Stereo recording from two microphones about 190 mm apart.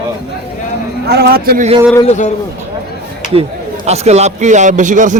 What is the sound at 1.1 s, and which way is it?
Speech, 55° right (ahead or behind).